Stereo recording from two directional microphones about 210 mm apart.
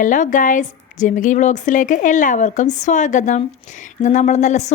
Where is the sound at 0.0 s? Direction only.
35° left (ahead or behind).